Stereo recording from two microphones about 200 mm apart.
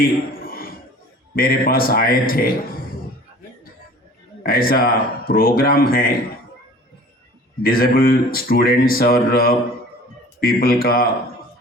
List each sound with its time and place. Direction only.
0.0 s a sound: 45° left (ahead or behind)
1.4 s speech: 45° left (ahead or behind)
4.4 s speech: 45° left (ahead or behind)
7.6 s speech: 45° left (ahead or behind)